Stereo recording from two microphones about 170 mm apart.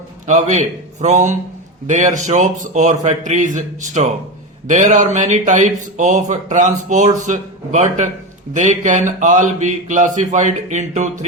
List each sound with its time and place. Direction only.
0.3 s speech: 45° right (ahead or behind)